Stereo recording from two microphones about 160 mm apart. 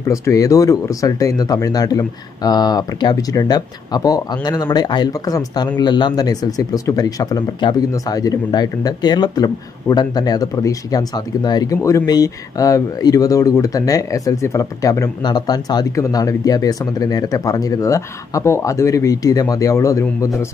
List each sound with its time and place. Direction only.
0.1 s speech: 20° left (ahead or behind)